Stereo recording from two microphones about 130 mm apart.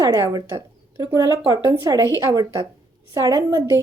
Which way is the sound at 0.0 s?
25° right (ahead or behind).